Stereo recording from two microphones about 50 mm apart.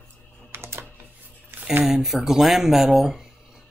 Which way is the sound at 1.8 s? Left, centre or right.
Centre.